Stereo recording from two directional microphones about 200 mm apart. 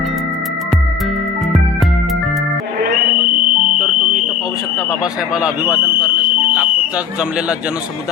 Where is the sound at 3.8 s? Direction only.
5° right (ahead or behind).